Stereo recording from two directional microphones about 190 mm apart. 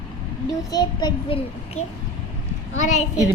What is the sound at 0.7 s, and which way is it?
Speech, 20° left (ahead or behind).